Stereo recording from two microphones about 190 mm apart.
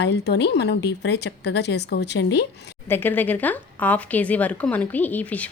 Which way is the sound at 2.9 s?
10° left (ahead or behind).